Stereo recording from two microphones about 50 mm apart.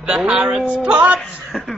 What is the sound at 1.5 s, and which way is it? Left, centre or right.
Speech, centre.